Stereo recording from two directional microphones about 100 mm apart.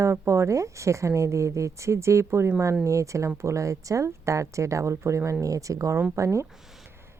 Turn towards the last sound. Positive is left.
turn(degrees=-30)  # may be behind; listen again after turning